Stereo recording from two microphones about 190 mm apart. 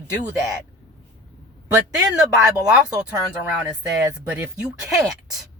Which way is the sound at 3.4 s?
5° right (ahead or behind).